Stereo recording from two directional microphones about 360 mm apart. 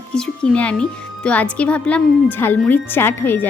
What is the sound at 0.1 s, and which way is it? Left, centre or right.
Speech, centre.